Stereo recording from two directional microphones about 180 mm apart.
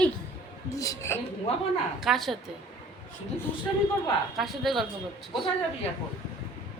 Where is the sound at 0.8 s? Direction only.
15° left (ahead or behind).